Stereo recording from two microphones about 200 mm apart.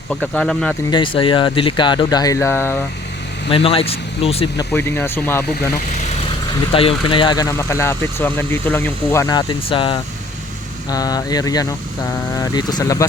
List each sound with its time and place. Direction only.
0.1 s speech: 5° left (ahead or behind)
0.9 s speech: 25° left (ahead or behind)
3.5 s speech: 30° left (ahead or behind)
4.5 s speech: 10° left (ahead or behind)
6.7 s speech: 25° left (ahead or behind)